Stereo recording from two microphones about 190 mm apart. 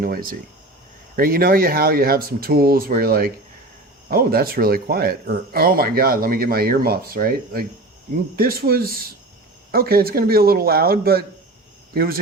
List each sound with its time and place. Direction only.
0.0 s speech: 50° right (ahead or behind)